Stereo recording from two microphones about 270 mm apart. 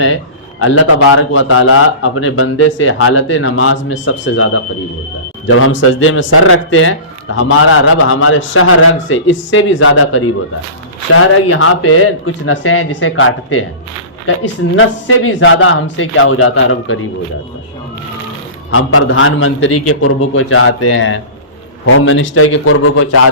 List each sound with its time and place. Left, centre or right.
0.6 s a man's voice: left
18.7 s a man's voice: left